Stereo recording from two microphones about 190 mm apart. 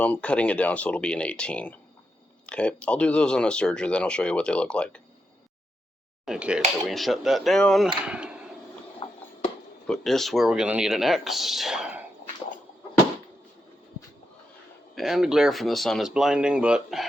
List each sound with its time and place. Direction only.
0.0 s speech: 5° left (ahead or behind)
6.2 s speech: 5° right (ahead or behind)
9.0 s a sound: 25° left (ahead or behind)
9.8 s speech: 5° left (ahead or behind)
14.9 s speech: centre (ahead or behind)